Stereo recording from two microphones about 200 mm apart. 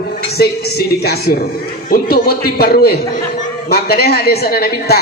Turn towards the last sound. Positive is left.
turn(degrees=50)  # may be behind; listen again after turning